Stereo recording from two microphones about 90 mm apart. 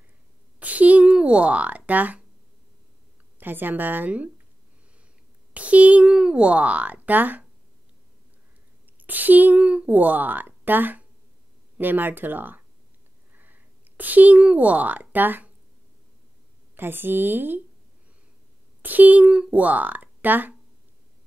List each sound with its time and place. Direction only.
0.6 s a sound: 15° right (ahead or behind)
1.1 s speech: 10° right (ahead or behind)
3.3 s a woman's voice: 20° right (ahead or behind)
5.5 s speech: 15° right (ahead or behind)
8.9 s a woman's voice: 20° right (ahead or behind)
13.3 s a sound: 20° right (ahead or behind)
16.7 s a woman's voice: 25° right (ahead or behind)
18.8 s speech: 20° right (ahead or behind)